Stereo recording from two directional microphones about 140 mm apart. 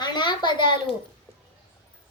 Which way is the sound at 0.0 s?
30° left (ahead or behind).